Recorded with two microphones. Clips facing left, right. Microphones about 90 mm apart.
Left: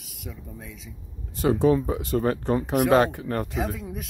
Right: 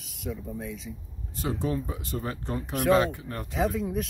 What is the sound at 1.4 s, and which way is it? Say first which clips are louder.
Speech: left 9 dB; 90° left.